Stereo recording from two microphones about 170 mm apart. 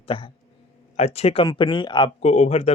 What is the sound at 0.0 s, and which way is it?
Speech, 30° left (ahead or behind).